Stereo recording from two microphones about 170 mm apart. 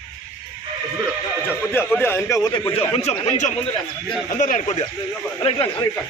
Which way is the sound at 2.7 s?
35° left (ahead or behind).